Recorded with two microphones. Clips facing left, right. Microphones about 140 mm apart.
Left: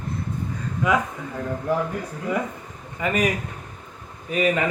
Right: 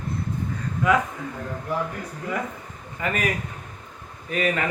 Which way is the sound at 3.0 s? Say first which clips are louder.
Left 4 dB; 15° left (ahead or behind).